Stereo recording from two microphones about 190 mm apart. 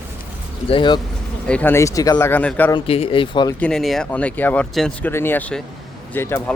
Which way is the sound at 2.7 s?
30° left (ahead or behind).